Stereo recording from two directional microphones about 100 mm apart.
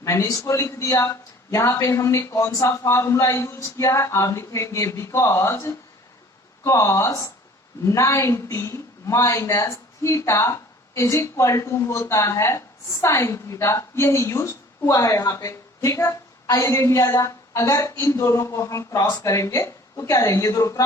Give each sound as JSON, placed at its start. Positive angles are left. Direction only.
{"t": 0.0, "sound": "a woman's voice", "side_deg": 30}